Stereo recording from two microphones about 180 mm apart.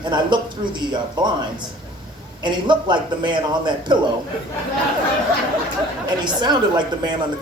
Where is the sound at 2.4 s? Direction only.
25° right (ahead or behind).